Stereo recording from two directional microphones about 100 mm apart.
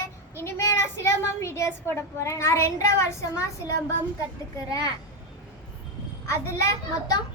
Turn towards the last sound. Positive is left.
turn(degrees=35)  # may be behind; listen again after turning